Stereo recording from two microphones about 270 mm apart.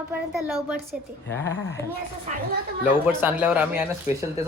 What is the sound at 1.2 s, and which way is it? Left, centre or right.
Speech, centre.